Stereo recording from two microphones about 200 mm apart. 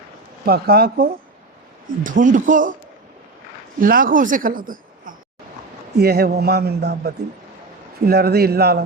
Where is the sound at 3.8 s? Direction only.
45° right (ahead or behind).